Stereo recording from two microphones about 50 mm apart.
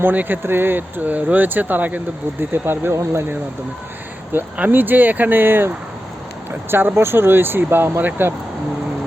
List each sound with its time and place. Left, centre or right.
0.0 s speech: right
4.3 s speech: right